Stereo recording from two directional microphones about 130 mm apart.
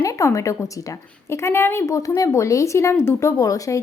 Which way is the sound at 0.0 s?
25° left (ahead or behind).